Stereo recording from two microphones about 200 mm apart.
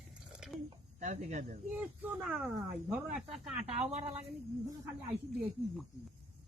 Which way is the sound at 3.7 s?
35° right (ahead or behind).